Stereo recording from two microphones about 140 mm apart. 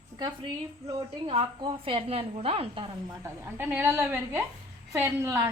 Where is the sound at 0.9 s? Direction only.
35° right (ahead or behind).